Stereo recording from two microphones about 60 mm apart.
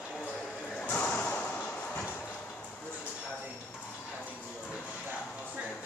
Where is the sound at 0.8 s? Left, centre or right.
Left.